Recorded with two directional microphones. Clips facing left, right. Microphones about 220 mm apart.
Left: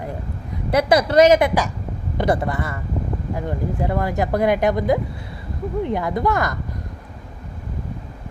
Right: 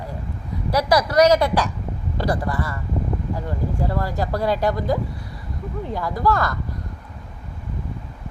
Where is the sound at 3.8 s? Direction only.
20° left (ahead or behind).